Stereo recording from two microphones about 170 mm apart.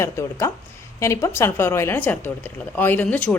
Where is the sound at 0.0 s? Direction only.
15° left (ahead or behind).